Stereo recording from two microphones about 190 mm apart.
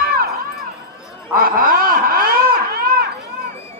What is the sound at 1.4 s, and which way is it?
Snicker, 50° right (ahead or behind).